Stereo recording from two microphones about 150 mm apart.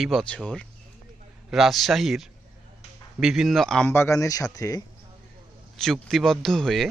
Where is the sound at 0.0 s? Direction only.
5° left (ahead or behind).